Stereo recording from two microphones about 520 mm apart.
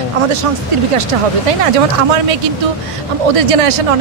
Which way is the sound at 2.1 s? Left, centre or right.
Right.